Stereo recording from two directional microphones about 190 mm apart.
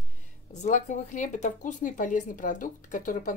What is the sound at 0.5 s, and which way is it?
Speech, 40° left (ahead or behind).